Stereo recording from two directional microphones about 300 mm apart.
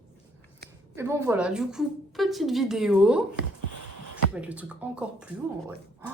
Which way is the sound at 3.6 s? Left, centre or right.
Right.